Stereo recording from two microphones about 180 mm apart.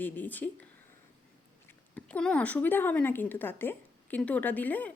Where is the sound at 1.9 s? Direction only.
5° left (ahead or behind).